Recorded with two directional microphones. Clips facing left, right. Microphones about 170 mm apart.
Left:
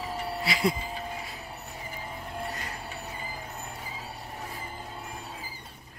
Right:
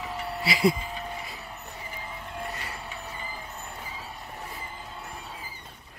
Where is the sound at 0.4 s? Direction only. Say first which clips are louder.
Right 4 dB; 5° right (ahead or behind).